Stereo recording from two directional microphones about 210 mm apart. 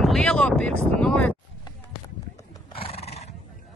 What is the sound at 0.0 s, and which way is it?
Speech, centre (ahead or behind).